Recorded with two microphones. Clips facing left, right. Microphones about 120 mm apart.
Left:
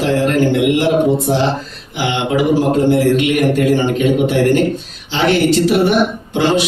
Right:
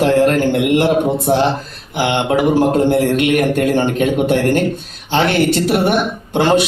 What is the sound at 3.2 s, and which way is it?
A man's voice, 50° right (ahead or behind).